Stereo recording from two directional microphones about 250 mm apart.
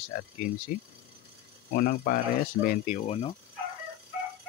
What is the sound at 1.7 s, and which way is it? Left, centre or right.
Speech, left.